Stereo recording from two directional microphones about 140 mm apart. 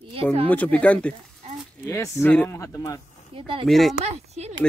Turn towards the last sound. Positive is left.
turn(degrees=-50)  # may be behind; listen again after turning